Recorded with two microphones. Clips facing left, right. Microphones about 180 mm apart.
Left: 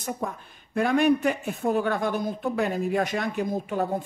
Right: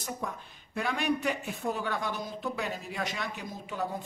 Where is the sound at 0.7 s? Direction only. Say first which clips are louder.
Left 9 dB; 50° left (ahead or behind).